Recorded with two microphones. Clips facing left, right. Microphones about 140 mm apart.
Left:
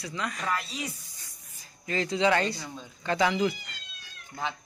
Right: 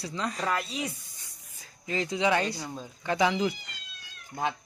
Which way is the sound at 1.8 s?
15° right (ahead or behind).